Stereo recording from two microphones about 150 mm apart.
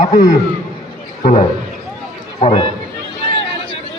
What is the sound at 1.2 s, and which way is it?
A man's voice, 45° left (ahead or behind).